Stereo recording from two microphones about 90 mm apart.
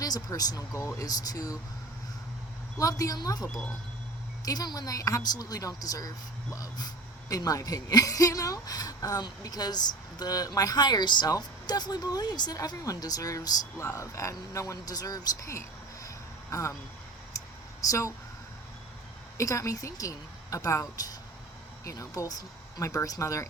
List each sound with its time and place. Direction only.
0.0 s speech: 45° left (ahead or behind)
2.7 s speech: 40° left (ahead or behind)
4.4 s speech: 45° left (ahead or behind)
16.0 s vehicle: 35° left (ahead or behind)
17.3 s a sound: 40° left (ahead or behind)
19.4 s speech: 35° left (ahead or behind)